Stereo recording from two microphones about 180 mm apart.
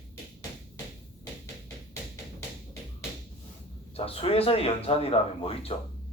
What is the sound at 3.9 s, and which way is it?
Speech, 35° left (ahead or behind).